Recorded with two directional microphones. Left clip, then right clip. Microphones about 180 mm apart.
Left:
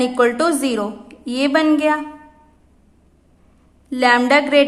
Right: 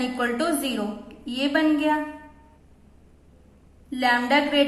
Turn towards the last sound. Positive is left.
turn(degrees=45)  # may be behind; listen again after turning